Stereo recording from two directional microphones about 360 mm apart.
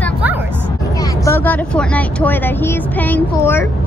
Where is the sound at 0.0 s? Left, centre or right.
Centre.